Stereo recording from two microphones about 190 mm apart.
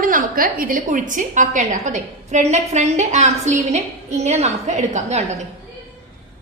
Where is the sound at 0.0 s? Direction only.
45° right (ahead or behind).